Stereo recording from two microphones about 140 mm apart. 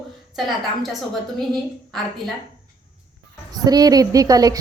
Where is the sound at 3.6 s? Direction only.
25° right (ahead or behind).